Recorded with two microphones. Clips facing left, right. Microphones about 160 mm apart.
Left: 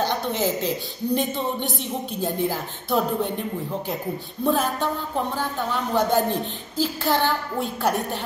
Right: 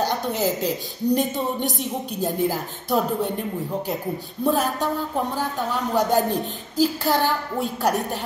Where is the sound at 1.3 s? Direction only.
40° right (ahead or behind).